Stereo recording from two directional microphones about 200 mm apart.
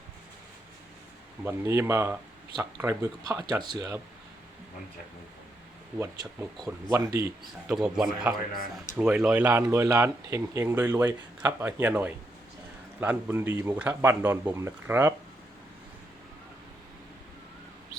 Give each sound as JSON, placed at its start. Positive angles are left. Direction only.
{"t": 1.5, "sound": "speech", "side_deg": -10}
{"t": 6.9, "sound": "speech", "side_deg": -15}
{"t": 7.7, "sound": "speech", "side_deg": -5}